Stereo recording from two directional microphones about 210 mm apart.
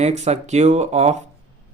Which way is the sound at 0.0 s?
30° right (ahead or behind).